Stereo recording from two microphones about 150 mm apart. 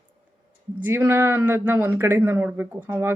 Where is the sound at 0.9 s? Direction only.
15° right (ahead or behind).